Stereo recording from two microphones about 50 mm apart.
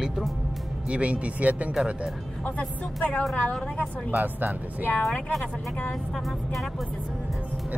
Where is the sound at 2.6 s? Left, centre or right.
Left.